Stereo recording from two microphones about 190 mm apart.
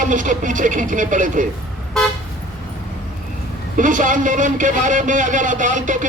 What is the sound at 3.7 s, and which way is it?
A man's voice, 45° right (ahead or behind).